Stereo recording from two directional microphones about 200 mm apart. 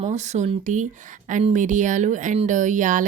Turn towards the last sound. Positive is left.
turn(degrees=-40)  # may be behind; listen again after turning